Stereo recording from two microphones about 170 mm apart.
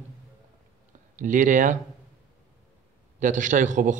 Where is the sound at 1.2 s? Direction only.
50° right (ahead or behind).